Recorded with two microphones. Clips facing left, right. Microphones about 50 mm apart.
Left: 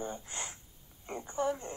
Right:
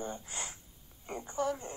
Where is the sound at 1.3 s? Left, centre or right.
Left.